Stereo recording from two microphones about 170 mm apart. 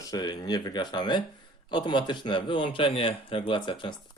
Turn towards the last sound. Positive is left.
turn(degrees=30)  # may be behind; listen again after turning